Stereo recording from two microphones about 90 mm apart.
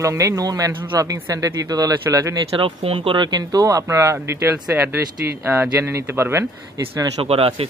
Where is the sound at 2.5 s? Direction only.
85° right.